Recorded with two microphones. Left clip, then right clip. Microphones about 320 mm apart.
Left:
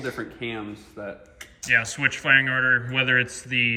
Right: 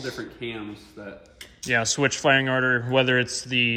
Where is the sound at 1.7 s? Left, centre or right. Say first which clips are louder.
Even; centre.